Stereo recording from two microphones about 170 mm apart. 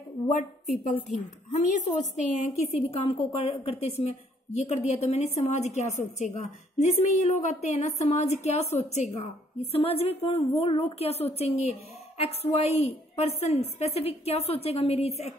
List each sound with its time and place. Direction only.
0.8 s a woman's voice: 45° left (ahead or behind)